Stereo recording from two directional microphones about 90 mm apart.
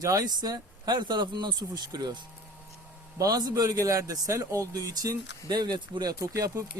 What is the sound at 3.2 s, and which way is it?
A man's voice, 45° right (ahead or behind).